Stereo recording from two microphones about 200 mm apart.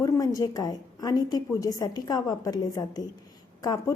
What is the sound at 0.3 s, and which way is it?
A woman's voice, 20° left (ahead or behind).